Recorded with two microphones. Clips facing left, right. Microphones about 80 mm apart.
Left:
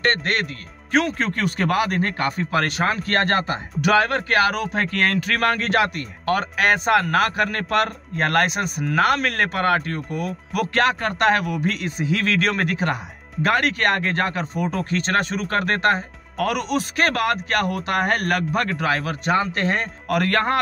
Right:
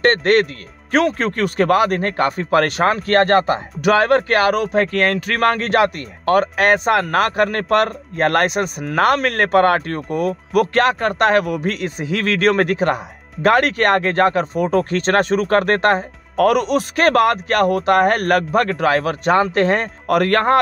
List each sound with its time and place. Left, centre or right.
0.0 s speech: right
0.9 s speech: right
3.8 s speech: right
13.4 s speech: right